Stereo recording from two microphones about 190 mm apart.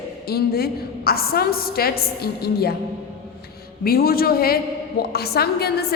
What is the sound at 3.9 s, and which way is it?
A woman's voice, 50° left (ahead or behind).